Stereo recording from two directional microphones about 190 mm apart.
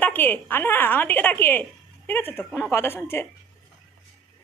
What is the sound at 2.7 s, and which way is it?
Speech, 15° left (ahead or behind).